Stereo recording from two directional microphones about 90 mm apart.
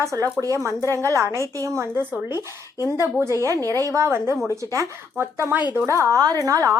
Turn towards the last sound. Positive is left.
turn(degrees=-40)  # may be behind; listen again after turning